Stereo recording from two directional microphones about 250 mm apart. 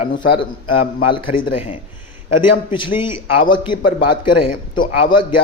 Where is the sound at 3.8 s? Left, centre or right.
Left.